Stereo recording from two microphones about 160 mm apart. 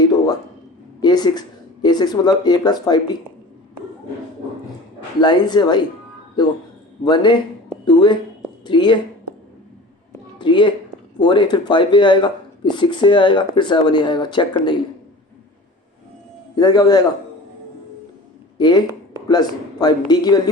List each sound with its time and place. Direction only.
1.0 s speech: 25° left (ahead or behind)
5.2 s speech: 25° left (ahead or behind)
7.0 s speech: 30° left (ahead or behind)
7.9 s a sound: 30° left (ahead or behind)
10.3 s a sound: 30° left (ahead or behind)
11.2 s speech: 30° left (ahead or behind)
16.6 s speech: 25° left (ahead or behind)
18.5 s speech: 25° left (ahead or behind)